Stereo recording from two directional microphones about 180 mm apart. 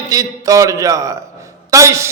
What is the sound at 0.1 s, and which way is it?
A man's voice, 20° right (ahead or behind).